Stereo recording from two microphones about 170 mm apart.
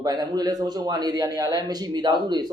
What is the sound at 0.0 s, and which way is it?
A man's voice, 25° right (ahead or behind).